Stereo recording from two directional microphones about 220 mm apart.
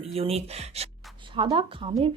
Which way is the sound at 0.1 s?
25° right (ahead or behind).